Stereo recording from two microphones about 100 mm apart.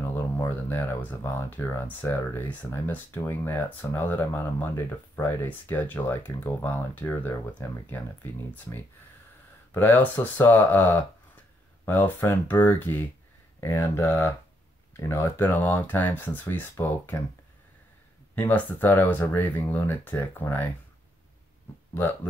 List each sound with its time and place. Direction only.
0.0 s speech: 20° left (ahead or behind)
18.3 s speech: 20° left (ahead or behind)
21.9 s speech: 20° left (ahead or behind)